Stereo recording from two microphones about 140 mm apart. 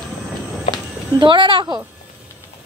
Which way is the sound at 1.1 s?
35° right (ahead or behind).